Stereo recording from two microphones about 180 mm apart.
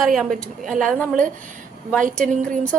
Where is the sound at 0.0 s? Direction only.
Centre (ahead or behind).